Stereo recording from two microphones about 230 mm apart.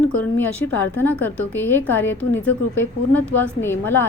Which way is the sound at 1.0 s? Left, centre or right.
Centre.